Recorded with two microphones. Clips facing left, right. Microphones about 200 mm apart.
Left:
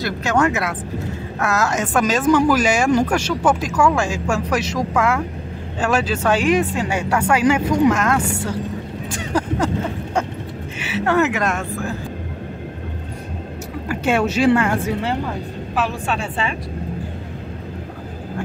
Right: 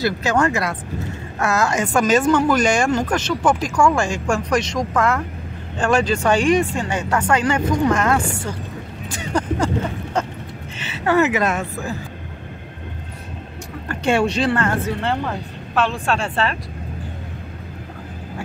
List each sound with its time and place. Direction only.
0.0 s speech: centre (ahead or behind)
10.8 s a sound: 5° left (ahead or behind)
11.1 s speech: 5° right (ahead or behind)
13.8 s speech: 5° left (ahead or behind)